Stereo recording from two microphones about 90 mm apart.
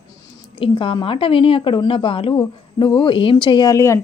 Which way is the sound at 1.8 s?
70° left (ahead or behind).